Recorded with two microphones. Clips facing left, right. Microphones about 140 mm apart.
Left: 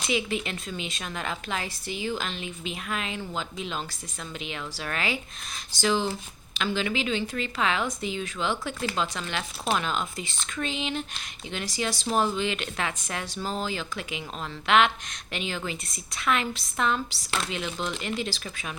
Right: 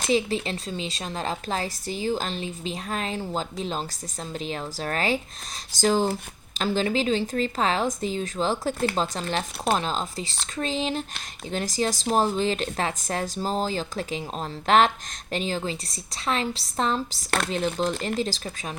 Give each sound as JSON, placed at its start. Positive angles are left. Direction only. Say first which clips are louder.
{"t": 0.0, "sound": "speech", "louder": "right 4 dB", "side_deg": -35}